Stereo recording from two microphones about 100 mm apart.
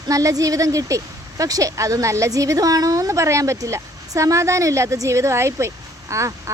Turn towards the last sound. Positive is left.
turn(degrees=-30)  # may be behind; listen again after turning